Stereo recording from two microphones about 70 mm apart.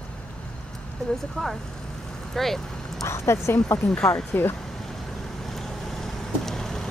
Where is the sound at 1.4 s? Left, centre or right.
Centre.